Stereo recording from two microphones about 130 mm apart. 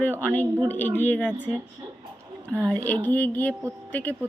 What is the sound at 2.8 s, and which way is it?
Speech, 15° left (ahead or behind).